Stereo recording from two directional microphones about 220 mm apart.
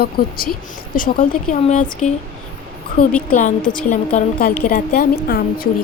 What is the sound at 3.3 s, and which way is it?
A woman's voice, 35° left (ahead or behind).